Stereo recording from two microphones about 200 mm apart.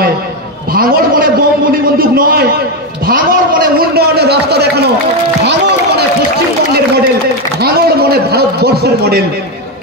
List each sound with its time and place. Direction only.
0.7 s a man's voice: 45° right (ahead or behind)
7.6 s a man's voice: 50° right (ahead or behind)